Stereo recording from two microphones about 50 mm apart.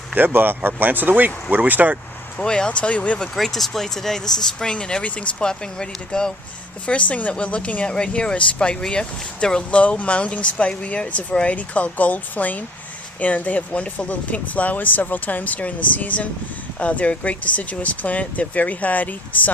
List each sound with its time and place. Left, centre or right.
0.3 s speech: right
2.4 s speech: centre
3.3 s speech: centre
6.8 s speech: left